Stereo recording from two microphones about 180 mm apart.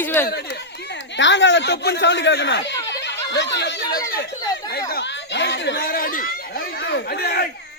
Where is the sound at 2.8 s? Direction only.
80° left.